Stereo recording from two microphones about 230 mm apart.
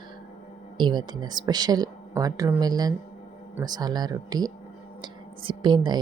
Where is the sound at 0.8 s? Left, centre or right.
Centre.